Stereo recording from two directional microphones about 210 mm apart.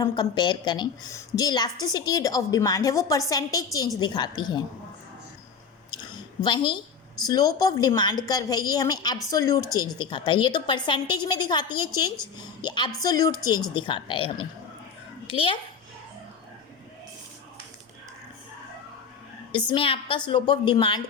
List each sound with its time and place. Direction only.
0.0 s a woman's voice: 20° left (ahead or behind)
5.9 s a sound: 20° left (ahead or behind)
7.3 s a woman's voice: 20° left (ahead or behind)
19.5 s a woman's voice: 20° left (ahead or behind)